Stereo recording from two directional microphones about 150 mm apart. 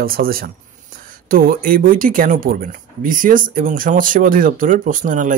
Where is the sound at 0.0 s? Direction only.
80° right.